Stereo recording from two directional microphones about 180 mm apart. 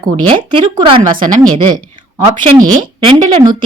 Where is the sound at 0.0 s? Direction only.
25° right (ahead or behind).